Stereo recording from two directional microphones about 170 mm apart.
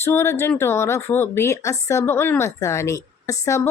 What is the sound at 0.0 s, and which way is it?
Speech, 15° left (ahead or behind).